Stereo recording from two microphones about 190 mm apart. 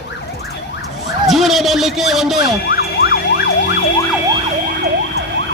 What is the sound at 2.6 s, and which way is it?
Emergency vehicle, 55° left (ahead or behind).